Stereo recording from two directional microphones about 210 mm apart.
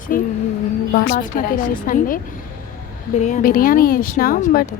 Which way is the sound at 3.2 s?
40° left (ahead or behind).